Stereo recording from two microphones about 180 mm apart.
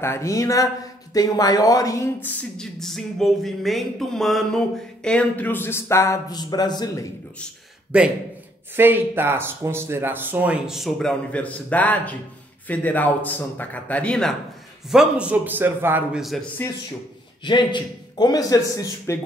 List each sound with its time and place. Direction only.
0.0 s a man's voice: 15° left (ahead or behind)
2.2 s a sound: 5° left (ahead or behind); by 7.1 s 20° left (ahead or behind)
7.9 s a sound: 5° right (ahead or behind)
8.7 s a man's voice: 10° right (ahead or behind); by 14.3 s 5° left (ahead or behind)
14.9 s speech: 5° right (ahead or behind)
17.4 s a man's voice: 25° left (ahead or behind)